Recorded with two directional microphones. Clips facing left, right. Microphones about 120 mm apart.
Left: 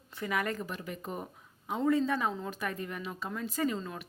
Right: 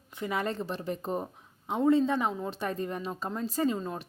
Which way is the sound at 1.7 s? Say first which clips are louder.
Right 4 dB; 25° right (ahead or behind).